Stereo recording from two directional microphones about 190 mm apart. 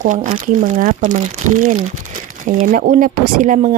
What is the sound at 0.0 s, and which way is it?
Speech, 40° right (ahead or behind).